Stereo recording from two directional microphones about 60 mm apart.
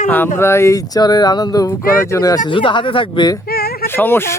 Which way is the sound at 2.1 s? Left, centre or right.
Left.